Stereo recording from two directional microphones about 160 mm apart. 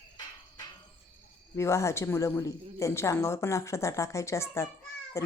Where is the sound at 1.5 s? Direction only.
15° left (ahead or behind).